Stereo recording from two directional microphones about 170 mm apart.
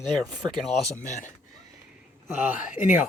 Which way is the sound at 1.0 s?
45° left (ahead or behind).